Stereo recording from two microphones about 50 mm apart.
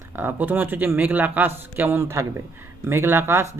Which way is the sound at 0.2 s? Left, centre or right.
Right.